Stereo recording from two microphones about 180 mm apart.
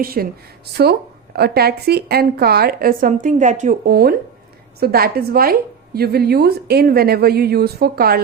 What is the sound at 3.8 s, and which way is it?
A woman's voice, 55° right (ahead or behind).